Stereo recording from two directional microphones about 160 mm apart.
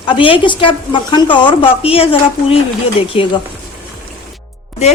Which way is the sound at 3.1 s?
35° left (ahead or behind).